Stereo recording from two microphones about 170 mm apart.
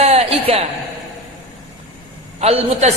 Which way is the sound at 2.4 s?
35° right (ahead or behind).